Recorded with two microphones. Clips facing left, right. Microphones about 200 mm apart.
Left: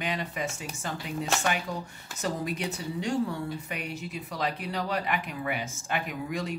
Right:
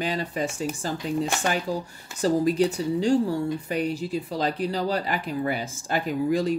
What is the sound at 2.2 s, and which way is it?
Speech, 35° right (ahead or behind).